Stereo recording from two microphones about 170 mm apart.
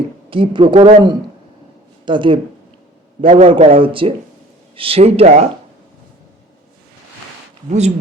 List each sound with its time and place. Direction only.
0.3 s a man's voice: 30° right (ahead or behind)
2.0 s a man's voice: 30° right (ahead or behind)
7.7 s a man's voice: 40° right (ahead or behind)